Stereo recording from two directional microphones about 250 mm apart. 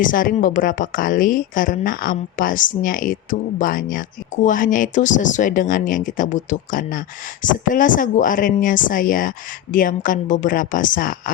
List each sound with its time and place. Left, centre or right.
0.0 s a woman's voice: left